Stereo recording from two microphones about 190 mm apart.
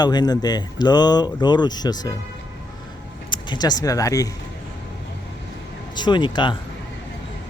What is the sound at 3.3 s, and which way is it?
Speech, 20° left (ahead or behind).